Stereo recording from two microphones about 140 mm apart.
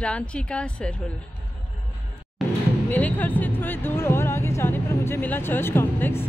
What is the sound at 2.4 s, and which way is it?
Music, centre (ahead or behind).